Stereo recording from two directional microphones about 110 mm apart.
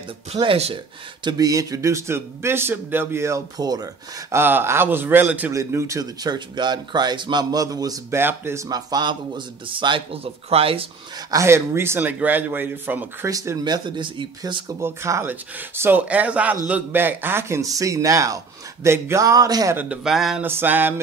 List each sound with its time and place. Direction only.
0.3 s speech: 75° right (ahead or behind)
1.2 s speech: 35° right (ahead or behind)
4.4 s speech: 20° right (ahead or behind)
5.5 s speech: 25° right (ahead or behind)
8.2 s speech: 20° right (ahead or behind)
8.6 s speech: 35° right (ahead or behind)
9.7 s speech: 50° right (ahead or behind)
11.2 s speech: 25° right (ahead or behind)
13.3 s speech: 30° right (ahead or behind)
14.8 s speech: 25° right (ahead or behind)
19.7 s speech: 15° right (ahead or behind)
20.0 s speech: 5° right (ahead or behind)
20.4 s speech: 20° right (ahead or behind)